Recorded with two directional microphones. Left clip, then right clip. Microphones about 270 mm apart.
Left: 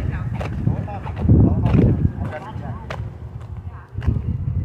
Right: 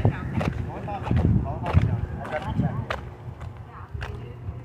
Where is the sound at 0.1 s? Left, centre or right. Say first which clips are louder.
Even; centre.